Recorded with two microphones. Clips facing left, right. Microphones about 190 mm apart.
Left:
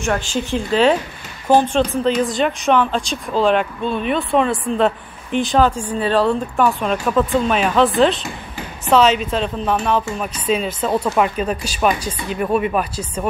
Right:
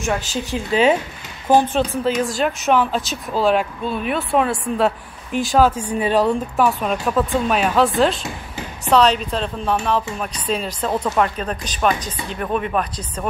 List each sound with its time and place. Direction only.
0.5 s speech: 5° right (ahead or behind)